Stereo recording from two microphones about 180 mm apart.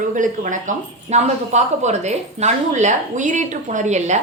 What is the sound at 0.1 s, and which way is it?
Speech, 45° right (ahead or behind).